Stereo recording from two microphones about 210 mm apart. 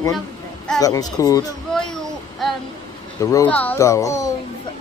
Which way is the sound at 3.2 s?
10° left (ahead or behind).